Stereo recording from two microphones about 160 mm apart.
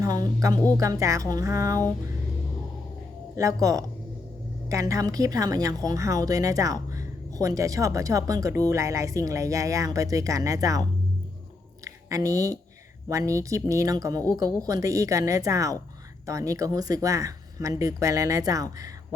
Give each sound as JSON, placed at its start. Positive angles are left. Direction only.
{"t": 0.0, "sound": "a woman's voice", "side_deg": -25}
{"t": 3.3, "sound": "a woman's voice", "side_deg": -20}
{"t": 11.9, "sound": "a sound", "side_deg": -20}
{"t": 13.1, "sound": "a woman's voice", "side_deg": -20}